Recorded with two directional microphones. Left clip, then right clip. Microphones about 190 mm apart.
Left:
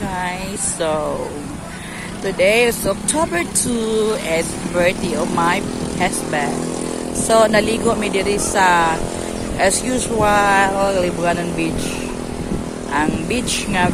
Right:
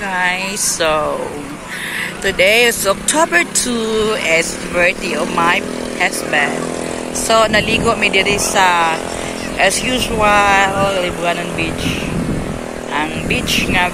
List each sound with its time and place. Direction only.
0.1 s speech: 10° left (ahead or behind)
2.2 s speech: 5° left (ahead or behind); by 11.7 s 30° left (ahead or behind)
12.9 s speech: 30° left (ahead or behind)